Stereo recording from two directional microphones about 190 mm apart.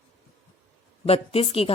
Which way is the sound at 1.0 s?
30° left (ahead or behind).